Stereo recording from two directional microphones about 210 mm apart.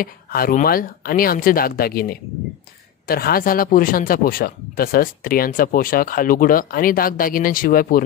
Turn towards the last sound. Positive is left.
turn(degrees=45)  # may be behind; listen again after turning